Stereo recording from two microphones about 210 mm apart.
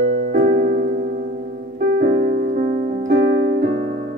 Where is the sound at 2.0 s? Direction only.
40° right (ahead or behind).